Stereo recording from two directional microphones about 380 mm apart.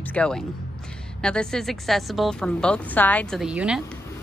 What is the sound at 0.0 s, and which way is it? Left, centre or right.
A woman's voice, centre.